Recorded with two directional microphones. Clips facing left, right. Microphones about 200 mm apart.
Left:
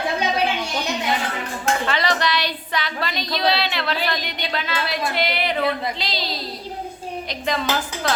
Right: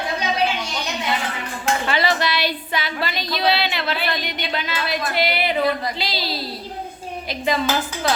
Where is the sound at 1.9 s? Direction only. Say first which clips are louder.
Right 1 dB; 5° right (ahead or behind).